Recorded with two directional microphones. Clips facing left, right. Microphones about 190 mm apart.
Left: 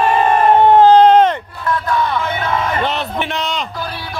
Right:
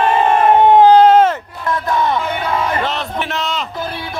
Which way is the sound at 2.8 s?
Centre (ahead or behind).